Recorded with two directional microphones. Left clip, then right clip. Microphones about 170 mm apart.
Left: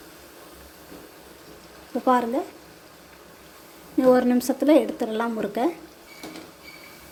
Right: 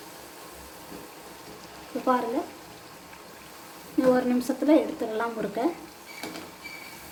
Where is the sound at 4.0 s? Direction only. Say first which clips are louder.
Left 4 dB; 35° left (ahead or behind).